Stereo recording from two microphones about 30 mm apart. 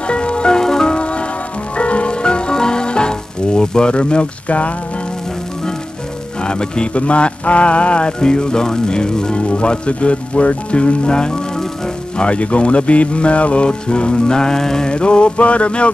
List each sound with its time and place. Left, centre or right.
0.0 s music: left
0.6 s music: left
0.9 s music: left
3.9 s speech: left
4.5 s speech: left
6.4 s speech: left
6.9 s speech: left
8.2 s music: left
9.4 s speech: left
12.2 s speech: left
13.7 s music: left; by 14.9 s centre
14.9 s music: left
15.3 s speech: left